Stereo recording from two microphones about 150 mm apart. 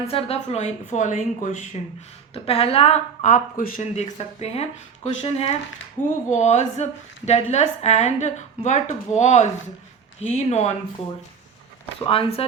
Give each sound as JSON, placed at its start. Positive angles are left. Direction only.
{"t": 0.1, "sound": "a woman's voice", "side_deg": 40}
{"t": 2.3, "sound": "a woman's voice", "side_deg": 40}
{"t": 3.9, "sound": "a woman's voice", "side_deg": 45}
{"t": 6.0, "sound": "speech", "side_deg": 10}
{"t": 6.3, "sound": "a woman's voice", "side_deg": 50}
{"t": 11.9, "sound": "speech", "side_deg": 40}